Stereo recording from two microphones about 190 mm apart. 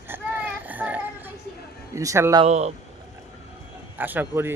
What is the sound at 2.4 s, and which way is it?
Speech, 35° right (ahead or behind).